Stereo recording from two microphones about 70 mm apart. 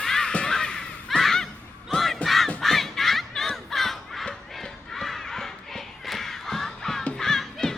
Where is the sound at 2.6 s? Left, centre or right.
Centre.